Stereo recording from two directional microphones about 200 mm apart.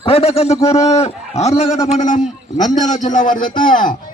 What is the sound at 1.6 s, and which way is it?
Speech, 15° left (ahead or behind).